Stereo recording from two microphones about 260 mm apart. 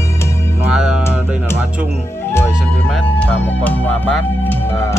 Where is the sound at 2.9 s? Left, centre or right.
Centre.